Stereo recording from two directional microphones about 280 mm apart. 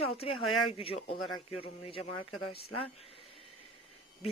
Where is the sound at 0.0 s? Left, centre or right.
Left.